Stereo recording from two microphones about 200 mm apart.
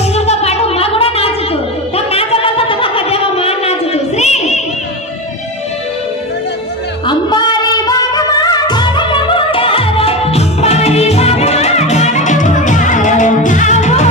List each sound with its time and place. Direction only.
0.1 s music: 30° left (ahead or behind)
2.0 s a sound: 30° left (ahead or behind)
7.1 s music: 20° left (ahead or behind)